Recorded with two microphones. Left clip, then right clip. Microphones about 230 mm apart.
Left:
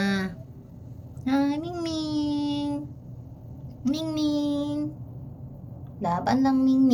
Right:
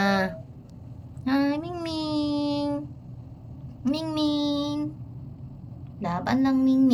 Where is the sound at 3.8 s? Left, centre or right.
Centre.